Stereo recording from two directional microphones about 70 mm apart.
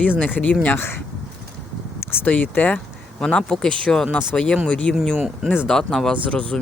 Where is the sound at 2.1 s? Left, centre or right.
Left.